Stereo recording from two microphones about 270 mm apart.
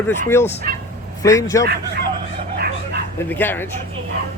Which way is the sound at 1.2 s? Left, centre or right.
Centre.